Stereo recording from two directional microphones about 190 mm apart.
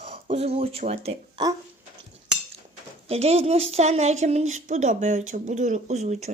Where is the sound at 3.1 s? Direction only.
35° right (ahead or behind).